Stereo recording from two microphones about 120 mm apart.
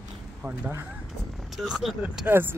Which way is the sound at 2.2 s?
20° right (ahead or behind).